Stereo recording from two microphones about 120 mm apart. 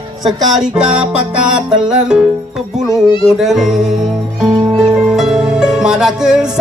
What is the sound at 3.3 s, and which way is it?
Music, 5° right (ahead or behind).